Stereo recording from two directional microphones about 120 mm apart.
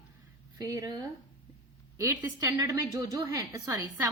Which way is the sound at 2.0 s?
25° right (ahead or behind).